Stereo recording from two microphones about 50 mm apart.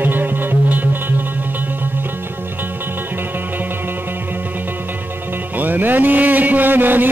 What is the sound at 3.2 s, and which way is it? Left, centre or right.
Music, right.